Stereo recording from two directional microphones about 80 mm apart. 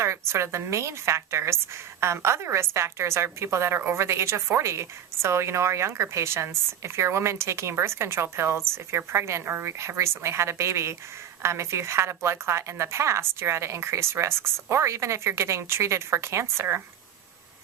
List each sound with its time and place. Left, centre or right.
0.0 s a woman's voice: right